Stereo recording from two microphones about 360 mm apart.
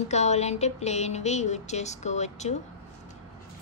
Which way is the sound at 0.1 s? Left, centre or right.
Centre.